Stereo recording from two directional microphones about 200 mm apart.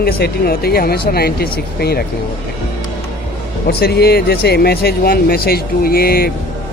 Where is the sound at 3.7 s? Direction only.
50° left (ahead or behind).